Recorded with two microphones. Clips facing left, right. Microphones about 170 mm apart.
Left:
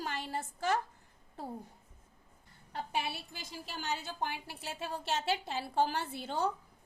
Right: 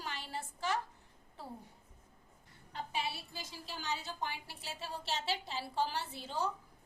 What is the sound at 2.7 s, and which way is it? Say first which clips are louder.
A woman's voice: left 3 dB; 55° left (ahead or behind).